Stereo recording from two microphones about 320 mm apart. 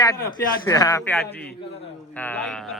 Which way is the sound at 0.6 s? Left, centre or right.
Centre.